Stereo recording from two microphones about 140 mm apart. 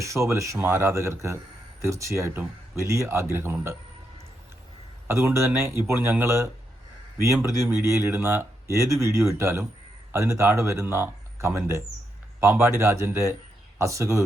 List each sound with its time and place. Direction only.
0.0 s speech: 20° right (ahead or behind)
5.0 s speech: 20° right (ahead or behind)
7.6 s speech: 20° right (ahead or behind)